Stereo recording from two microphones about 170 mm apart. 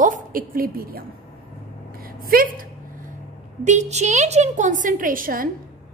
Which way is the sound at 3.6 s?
45° right (ahead or behind).